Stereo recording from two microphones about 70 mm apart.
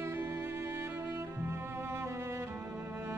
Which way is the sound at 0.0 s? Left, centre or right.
Right.